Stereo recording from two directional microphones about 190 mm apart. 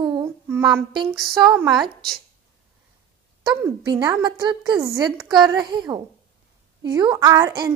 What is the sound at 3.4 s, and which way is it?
A woman's voice, 20° right (ahead or behind).